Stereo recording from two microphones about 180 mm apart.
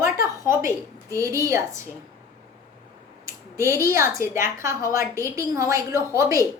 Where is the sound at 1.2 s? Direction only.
15° right (ahead or behind).